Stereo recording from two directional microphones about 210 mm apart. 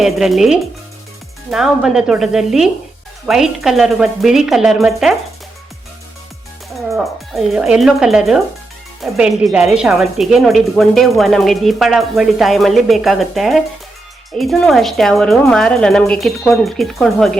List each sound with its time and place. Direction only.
0.0 s speech: centre (ahead or behind)
6.9 s speech: centre (ahead or behind)